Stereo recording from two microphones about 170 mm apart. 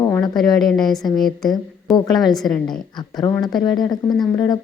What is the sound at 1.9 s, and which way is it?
Speech, 25° left (ahead or behind).